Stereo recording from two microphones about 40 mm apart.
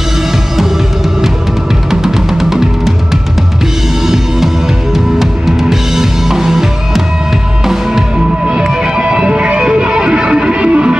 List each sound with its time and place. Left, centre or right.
1.9 s music: centre
4.9 s music: centre
8.8 s music: right